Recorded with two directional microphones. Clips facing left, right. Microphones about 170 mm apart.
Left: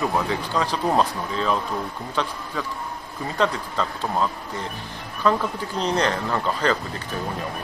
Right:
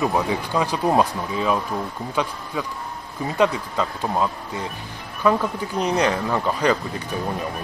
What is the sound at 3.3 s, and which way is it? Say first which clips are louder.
Speech: right 3 dB; 10° right (ahead or behind).